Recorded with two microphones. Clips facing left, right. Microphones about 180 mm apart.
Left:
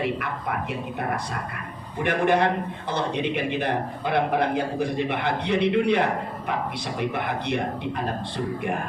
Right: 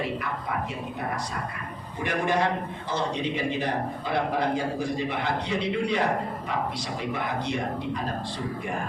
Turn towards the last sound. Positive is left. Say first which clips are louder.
# left 2 dB
turn(degrees=60)  # may be behind; listen again after turning